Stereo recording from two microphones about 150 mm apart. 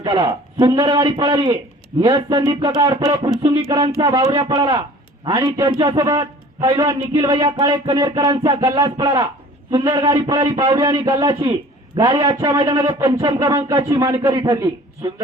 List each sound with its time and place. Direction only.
0.0 s a man's voice: 30° right (ahead or behind)
3.5 s a man's voice: 20° right (ahead or behind)
3.8 s a man's voice: 30° right (ahead or behind)